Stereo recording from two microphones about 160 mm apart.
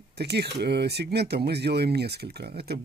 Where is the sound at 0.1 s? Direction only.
90° right.